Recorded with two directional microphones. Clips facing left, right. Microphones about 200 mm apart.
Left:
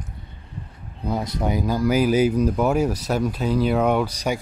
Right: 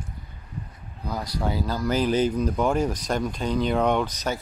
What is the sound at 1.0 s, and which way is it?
Speech, 25° left (ahead or behind).